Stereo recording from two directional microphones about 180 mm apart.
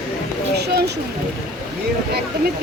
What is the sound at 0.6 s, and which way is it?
Speech, 65° right (ahead or behind).